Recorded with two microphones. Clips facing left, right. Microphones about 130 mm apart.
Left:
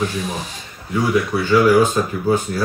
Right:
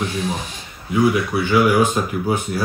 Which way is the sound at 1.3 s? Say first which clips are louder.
Left 2 dB; 15° right (ahead or behind).